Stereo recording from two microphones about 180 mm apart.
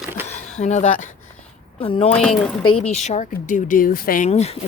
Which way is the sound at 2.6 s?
30° left (ahead or behind).